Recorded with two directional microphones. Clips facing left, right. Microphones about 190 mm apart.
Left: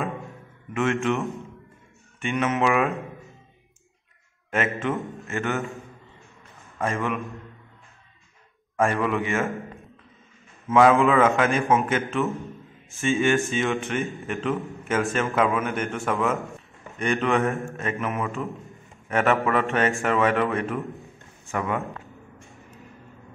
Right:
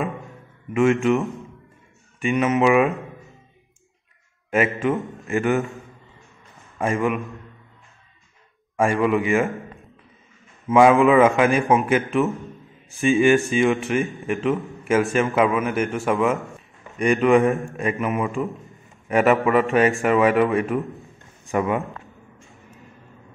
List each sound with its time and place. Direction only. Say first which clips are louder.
0.2 s music: left 1 dB; 5° right (ahead or behind)
2.2 s speech: right 5 dB; 5° right (ahead or behind)
4.5 s a man's voice: right 5 dB; 10° right (ahead or behind)
5.2 s a man's voice: right 9 dB; 15° right (ahead or behind)
6.8 s a man's voice: right 5 dB; 15° right (ahead or behind)
8.7 s a man's voice: right 4 dB; 10° right (ahead or behind)
9.5 s a sound: even; centre (ahead or behind)
10.7 s a man's voice: right 3 dB; 10° right (ahead or behind)
13.7 s a man's voice: right 5 dB; centre (ahead or behind)
18.4 s speech: right 5 dB; centre (ahead or behind)
19.0 s a man's voice: right 4 dB; 15° right (ahead or behind)
20.8 s a man's voice: right 1 dB; centre (ahead or behind)
21.5 s a man's voice: right 5 dB; 15° right (ahead or behind)